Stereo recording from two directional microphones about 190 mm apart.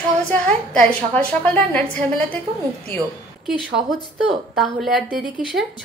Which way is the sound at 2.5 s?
30° right (ahead or behind).